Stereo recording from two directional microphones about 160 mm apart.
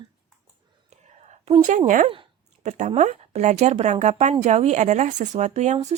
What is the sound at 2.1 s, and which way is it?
A woman's voice, 40° right (ahead or behind).